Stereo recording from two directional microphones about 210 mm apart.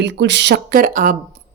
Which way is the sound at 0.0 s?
55° right (ahead or behind).